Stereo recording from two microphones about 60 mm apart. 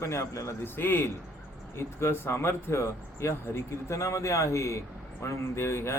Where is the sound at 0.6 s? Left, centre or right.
Left.